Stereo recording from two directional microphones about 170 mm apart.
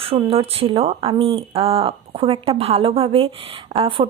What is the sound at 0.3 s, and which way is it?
A woman's voice, 35° right (ahead or behind).